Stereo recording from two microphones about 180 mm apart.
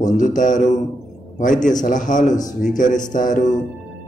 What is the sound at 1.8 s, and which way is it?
A man's voice, 45° left (ahead or behind).